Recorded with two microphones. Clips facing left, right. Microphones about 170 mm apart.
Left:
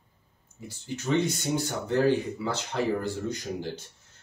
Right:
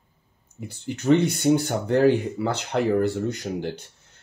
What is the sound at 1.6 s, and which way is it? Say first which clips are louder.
Speech: right 5 dB; 60° right (ahead or behind).